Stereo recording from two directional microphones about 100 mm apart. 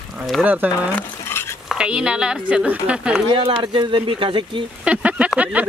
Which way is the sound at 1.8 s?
10° right (ahead or behind).